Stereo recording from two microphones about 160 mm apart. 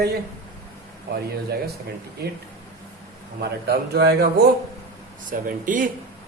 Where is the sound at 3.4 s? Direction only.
80° right.